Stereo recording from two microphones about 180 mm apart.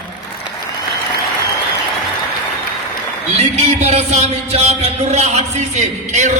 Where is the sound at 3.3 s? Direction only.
35° right (ahead or behind).